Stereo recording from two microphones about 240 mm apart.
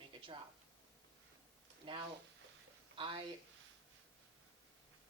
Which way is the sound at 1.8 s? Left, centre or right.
Right.